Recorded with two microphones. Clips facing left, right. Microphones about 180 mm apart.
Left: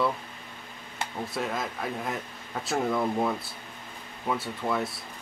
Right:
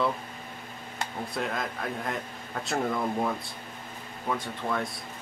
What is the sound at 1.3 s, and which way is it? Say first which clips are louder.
Speech: even; 5° left (ahead or behind).